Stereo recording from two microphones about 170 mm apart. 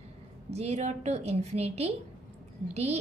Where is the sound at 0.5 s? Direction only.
40° right (ahead or behind).